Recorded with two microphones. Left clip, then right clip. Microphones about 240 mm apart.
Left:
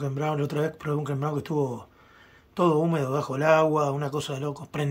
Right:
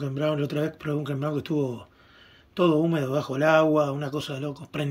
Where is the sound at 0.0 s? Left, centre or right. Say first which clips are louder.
Right 2 dB; centre.